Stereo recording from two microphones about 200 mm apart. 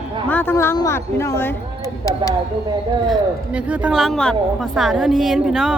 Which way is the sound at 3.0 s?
5° right (ahead or behind).